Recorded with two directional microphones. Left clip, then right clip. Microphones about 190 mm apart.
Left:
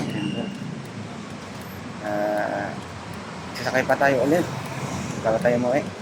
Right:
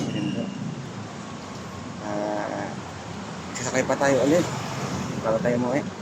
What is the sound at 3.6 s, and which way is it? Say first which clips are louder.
Speech: left 3 dB; 15° right (ahead or behind).